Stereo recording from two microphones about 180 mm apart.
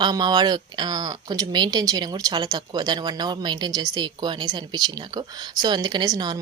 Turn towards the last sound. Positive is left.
turn(degrees=-25)  # may be behind; listen again after turning